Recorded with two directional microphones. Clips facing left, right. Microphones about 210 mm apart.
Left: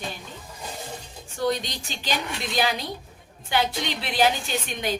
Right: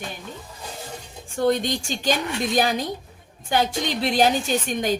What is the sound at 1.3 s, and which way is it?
A woman's voice, 50° right (ahead or behind).